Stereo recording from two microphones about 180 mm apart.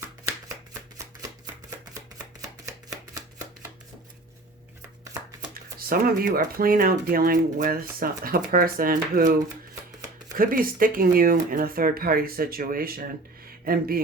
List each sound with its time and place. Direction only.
5.9 s speech: 55° right (ahead or behind)
10.3 s speech: 50° right (ahead or behind)